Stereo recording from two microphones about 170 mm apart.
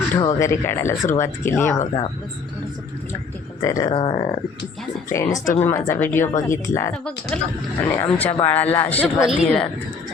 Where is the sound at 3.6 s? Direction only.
20° left (ahead or behind).